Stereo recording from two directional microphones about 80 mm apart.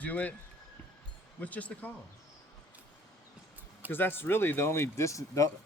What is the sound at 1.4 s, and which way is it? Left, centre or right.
Speech, centre.